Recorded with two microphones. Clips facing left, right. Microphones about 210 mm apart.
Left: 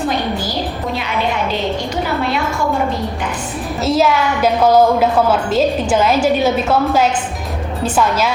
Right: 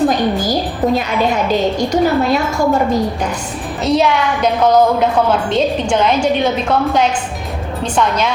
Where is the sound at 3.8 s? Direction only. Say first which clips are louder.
Right 1 dB; 5° left (ahead or behind).